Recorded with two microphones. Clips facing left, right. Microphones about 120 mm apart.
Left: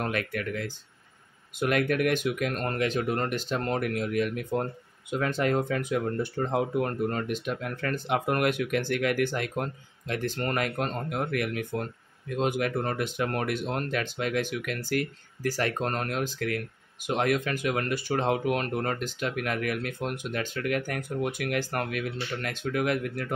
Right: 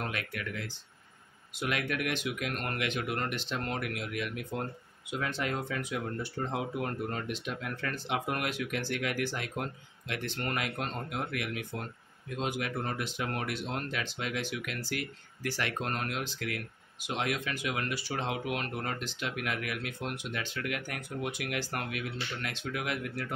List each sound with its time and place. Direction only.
0.0 s speech: 50° left (ahead or behind)